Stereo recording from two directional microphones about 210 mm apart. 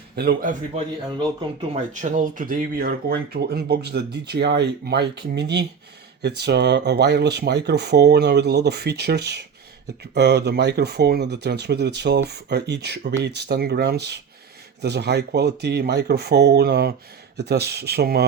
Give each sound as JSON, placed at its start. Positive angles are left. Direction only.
{"t": 0.2, "sound": "speech", "side_deg": -45}
{"t": 1.2, "sound": "speech", "side_deg": -25}
{"t": 1.9, "sound": "speech", "side_deg": -35}